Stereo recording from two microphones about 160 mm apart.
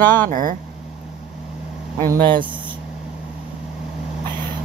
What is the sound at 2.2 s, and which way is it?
Speech, 30° right (ahead or behind).